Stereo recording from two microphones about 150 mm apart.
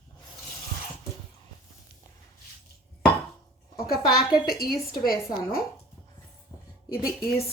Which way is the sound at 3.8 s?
90° left.